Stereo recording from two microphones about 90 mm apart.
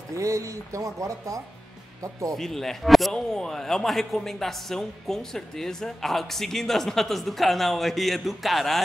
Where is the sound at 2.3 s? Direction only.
5° left (ahead or behind).